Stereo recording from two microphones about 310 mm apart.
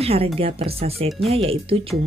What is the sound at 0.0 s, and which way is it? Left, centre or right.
Speech, centre.